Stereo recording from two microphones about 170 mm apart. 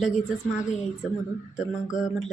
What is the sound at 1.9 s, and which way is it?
Speech, 5° right (ahead or behind).